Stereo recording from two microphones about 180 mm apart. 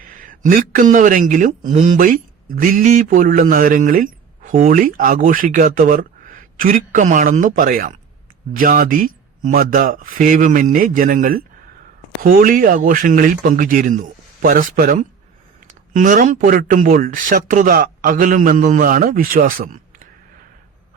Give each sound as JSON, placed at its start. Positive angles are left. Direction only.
{"t": 0.0, "sound": "a man's voice", "side_deg": -50}